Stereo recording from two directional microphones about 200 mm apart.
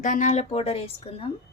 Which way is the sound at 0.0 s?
40° left (ahead or behind).